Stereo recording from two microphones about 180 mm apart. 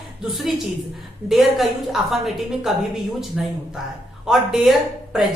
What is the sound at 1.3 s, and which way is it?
A woman's voice, centre (ahead or behind).